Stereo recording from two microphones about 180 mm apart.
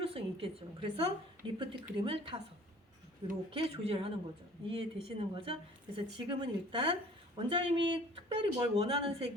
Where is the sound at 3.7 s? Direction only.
30° right (ahead or behind).